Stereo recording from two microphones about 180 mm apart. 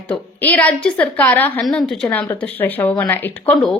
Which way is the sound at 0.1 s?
10° left (ahead or behind).